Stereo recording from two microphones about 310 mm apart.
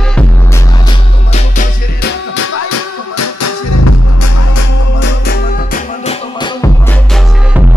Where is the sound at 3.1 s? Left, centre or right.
Left.